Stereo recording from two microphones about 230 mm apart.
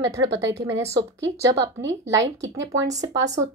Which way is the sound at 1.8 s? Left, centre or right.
Right.